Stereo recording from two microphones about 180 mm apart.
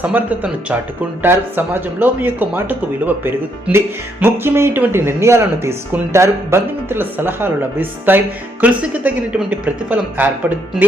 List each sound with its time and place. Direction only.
0.0 s speech: 10° right (ahead or behind)